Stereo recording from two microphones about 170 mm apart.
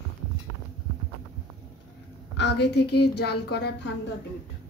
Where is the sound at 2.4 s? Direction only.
90° left; by 3.8 s 75° left (ahead or behind).